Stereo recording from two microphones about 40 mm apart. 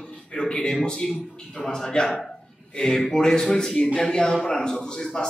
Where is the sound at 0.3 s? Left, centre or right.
Centre.